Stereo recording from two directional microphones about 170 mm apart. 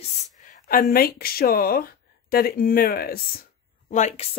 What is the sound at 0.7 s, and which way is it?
Speech, 60° left (ahead or behind).